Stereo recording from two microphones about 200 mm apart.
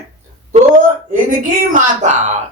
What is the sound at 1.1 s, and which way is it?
A man's voice, 40° right (ahead or behind).